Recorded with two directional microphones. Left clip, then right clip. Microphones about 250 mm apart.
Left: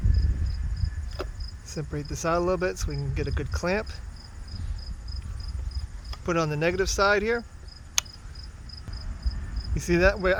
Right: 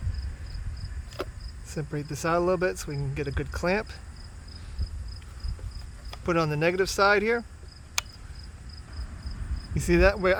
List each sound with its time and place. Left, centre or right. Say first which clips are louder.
1.2 s cricket: right 1 dB; right
1.6 s speech: right 1 dB; centre
6.1 s speech: right 1 dB; centre
9.7 s speech: even; centre